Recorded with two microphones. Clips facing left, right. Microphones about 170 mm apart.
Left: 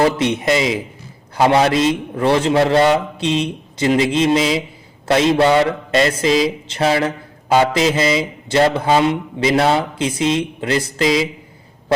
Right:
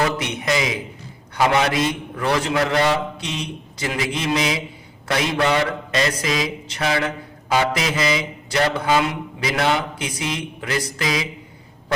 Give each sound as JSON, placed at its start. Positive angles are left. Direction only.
{"t": 0.0, "sound": "speech", "side_deg": 30}